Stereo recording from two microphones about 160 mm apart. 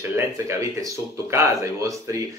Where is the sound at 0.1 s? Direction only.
20° right (ahead or behind).